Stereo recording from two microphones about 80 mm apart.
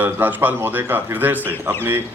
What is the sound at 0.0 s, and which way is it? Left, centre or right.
A man's voice, right.